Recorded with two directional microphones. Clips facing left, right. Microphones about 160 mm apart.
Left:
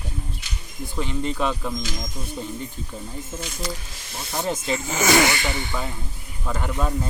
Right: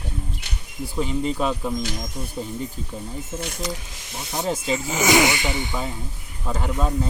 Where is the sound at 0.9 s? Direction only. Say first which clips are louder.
Right 3 dB; 5° right (ahead or behind).